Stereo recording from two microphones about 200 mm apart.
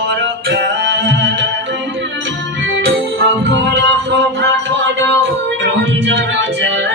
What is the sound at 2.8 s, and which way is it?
Music, 55° right (ahead or behind).